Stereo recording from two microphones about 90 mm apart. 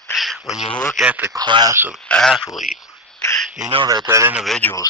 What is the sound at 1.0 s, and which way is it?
Speech, 15° right (ahead or behind).